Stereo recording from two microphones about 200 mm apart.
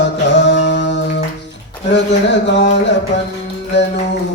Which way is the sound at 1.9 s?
60° left (ahead or behind).